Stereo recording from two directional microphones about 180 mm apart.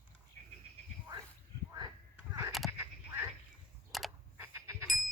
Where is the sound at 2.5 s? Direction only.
Centre (ahead or behind).